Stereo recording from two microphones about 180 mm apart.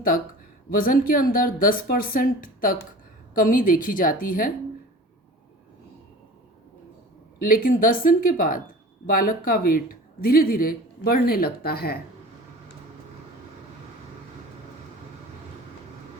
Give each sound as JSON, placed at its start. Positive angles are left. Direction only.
{"t": 0.7, "sound": "speech", "side_deg": 50}
{"t": 7.3, "sound": "speech", "side_deg": 50}